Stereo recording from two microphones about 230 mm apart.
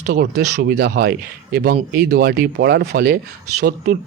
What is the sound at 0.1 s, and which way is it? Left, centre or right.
Speech, right.